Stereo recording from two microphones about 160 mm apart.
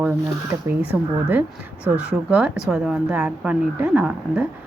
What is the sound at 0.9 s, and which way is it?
A woman's voice, 5° right (ahead or behind).